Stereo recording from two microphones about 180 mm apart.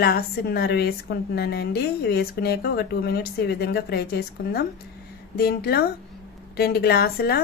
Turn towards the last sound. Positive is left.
turn(degrees=60)  # may be behind; listen again after turning